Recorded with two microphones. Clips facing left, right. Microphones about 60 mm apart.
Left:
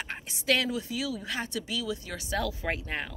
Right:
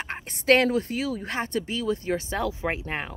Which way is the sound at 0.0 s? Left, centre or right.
Right.